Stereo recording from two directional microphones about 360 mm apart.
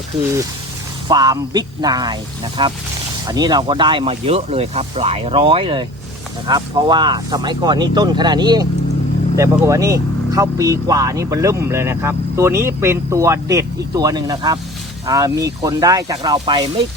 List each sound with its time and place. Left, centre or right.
1.0 s speech: centre